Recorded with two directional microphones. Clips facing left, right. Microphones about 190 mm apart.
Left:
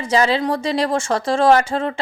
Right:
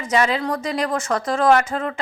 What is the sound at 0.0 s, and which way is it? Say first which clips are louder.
A woman's voice: left 3 dB; 30° left (ahead or behind).